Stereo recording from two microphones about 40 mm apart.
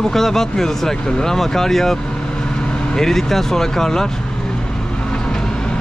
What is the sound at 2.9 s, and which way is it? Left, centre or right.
Speech, centre.